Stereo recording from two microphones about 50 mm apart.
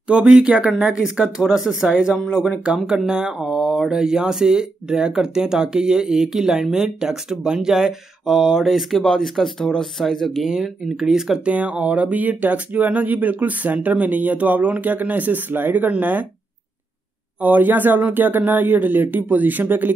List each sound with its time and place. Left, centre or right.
0.1 s speech: centre
1.5 s speech: centre
2.1 s speech: centre
2.5 s speech: centre
9.0 s speech: centre
10.4 s speech: centre
11.4 s speech: right
17.4 s speech: right